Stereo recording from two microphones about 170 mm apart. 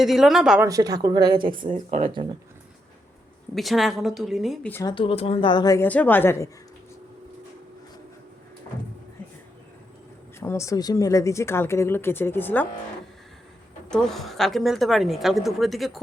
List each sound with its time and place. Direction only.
0.0 s a woman's voice: centre (ahead or behind)
0.6 s a woman's voice: 20° right (ahead or behind)
1.9 s speech: 45° right (ahead or behind)
3.5 s a woman's voice: centre (ahead or behind)
4.7 s a woman's voice: 20° left (ahead or behind)
4.9 s a woman's voice: 35° left (ahead or behind); by 6.5 s 15° left (ahead or behind)
10.4 s speech: 15° left (ahead or behind)
13.9 s a woman's voice: centre (ahead or behind)